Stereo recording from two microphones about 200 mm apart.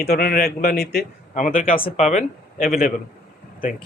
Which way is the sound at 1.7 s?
30° left (ahead or behind).